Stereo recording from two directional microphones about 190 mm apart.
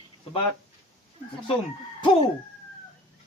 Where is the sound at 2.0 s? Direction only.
25° left (ahead or behind).